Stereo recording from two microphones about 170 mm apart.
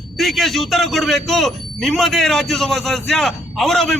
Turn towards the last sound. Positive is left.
turn(degrees=0)  # may be behind; listen again after turning